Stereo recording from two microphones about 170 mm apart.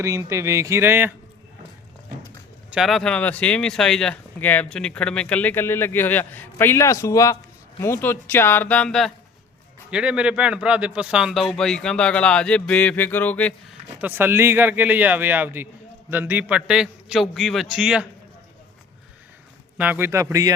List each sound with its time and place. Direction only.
0.0 s speech: 15° right (ahead or behind)
2.6 s a man's voice: 5° right (ahead or behind)
13.7 s a man's voice: 10° right (ahead or behind)
19.7 s speech: 10° right (ahead or behind)